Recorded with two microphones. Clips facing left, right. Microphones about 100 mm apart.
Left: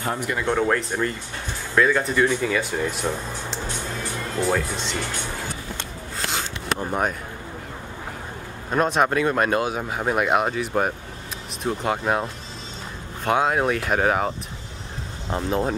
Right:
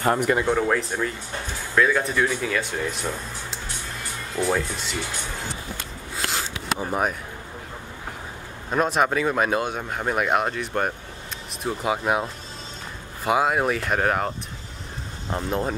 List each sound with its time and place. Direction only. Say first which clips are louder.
0.0 s speech: right 5 dB; 55° right (ahead or behind)
0.5 s speech: even; centre (ahead or behind)
6.1 s a sound: even; centre (ahead or behind)
8.6 s speech: left 1 dB; centre (ahead or behind)